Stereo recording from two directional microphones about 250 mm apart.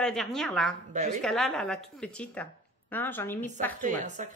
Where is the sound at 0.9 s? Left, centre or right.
Right.